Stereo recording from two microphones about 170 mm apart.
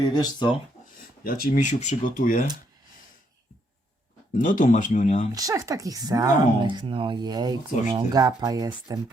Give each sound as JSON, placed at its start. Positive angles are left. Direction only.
{"t": 0.0, "sound": "speech", "side_deg": 25}
{"t": 1.2, "sound": "speech", "side_deg": 60}
{"t": 4.4, "sound": "speech", "side_deg": 50}
{"t": 5.3, "sound": "speech", "side_deg": -20}